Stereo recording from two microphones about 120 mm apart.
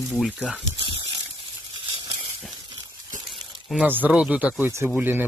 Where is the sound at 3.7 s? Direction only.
15° right (ahead or behind).